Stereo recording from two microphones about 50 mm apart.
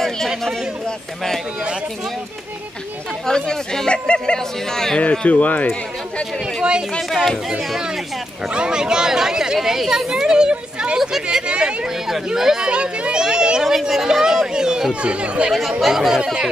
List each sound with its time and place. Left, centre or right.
0.8 s speech: centre
3.3 s speech: centre
5.2 s speech: left
6.4 s speech: centre
8.5 s speech: centre
11.0 s speech: centre
11.2 s speech: centre
13.7 s speech: centre; by 15.5 s right
15.8 s speech: centre